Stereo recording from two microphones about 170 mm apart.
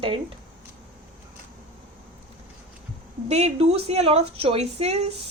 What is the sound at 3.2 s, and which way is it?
A woman's voice, 40° right (ahead or behind).